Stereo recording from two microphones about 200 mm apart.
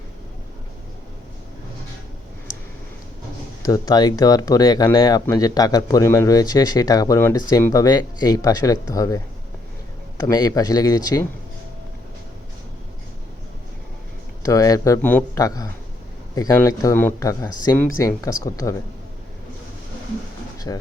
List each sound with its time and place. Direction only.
3.6 s speech: 20° left (ahead or behind)
14.4 s speech: 15° left (ahead or behind)
20.7 s speech: 20° left (ahead or behind)